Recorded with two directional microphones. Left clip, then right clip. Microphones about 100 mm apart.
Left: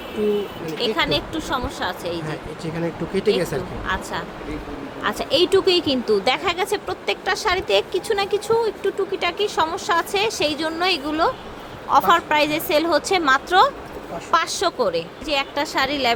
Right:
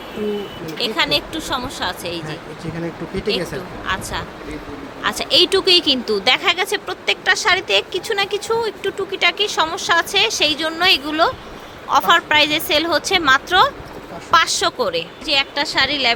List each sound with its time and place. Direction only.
0.8 s speech: 20° right (ahead or behind)
3.3 s speech: 25° right (ahead or behind)
5.0 s a woman's voice: 5° right (ahead or behind); by 13.7 s 10° left (ahead or behind)
14.3 s speech: centre (ahead or behind); by 16.1 s 15° left (ahead or behind)